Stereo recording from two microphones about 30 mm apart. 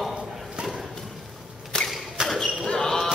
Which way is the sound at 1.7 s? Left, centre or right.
Left.